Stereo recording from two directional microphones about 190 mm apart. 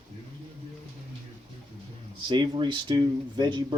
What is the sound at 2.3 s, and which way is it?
Speech, 25° right (ahead or behind).